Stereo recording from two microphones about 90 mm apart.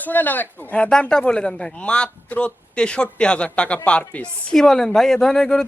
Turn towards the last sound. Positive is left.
turn(degrees=5)  # may be behind; listen again after turning